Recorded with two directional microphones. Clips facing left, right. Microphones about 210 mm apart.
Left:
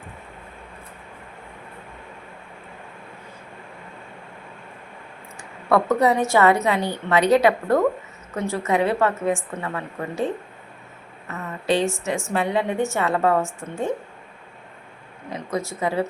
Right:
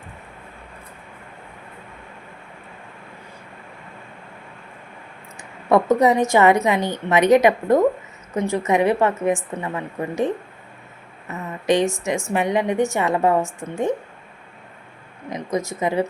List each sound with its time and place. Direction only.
5.4 s a woman's voice: 15° right (ahead or behind)
15.3 s a woman's voice: 15° right (ahead or behind)